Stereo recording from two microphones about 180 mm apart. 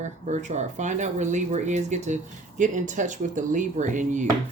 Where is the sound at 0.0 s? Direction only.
40° right (ahead or behind).